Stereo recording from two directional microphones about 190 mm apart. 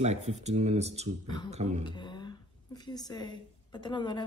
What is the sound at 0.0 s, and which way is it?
Speech, 35° right (ahead or behind).